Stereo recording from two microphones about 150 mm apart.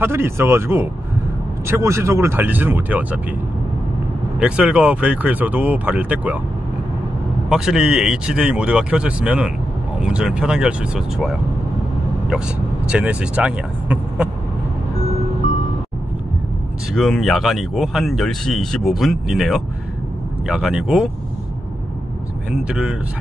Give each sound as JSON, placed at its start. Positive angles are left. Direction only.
{"t": 0.0, "sound": "speech", "side_deg": -15}
{"t": 4.4, "sound": "speech", "side_deg": -5}
{"t": 7.4, "sound": "speech", "side_deg": -5}
{"t": 16.9, "sound": "speech", "side_deg": 0}
{"t": 22.5, "sound": "speech", "side_deg": -5}